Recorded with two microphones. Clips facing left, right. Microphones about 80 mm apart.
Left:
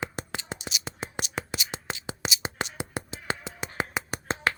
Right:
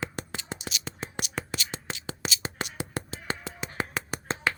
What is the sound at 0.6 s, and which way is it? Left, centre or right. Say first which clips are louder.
Whispering: left 1 dB; centre.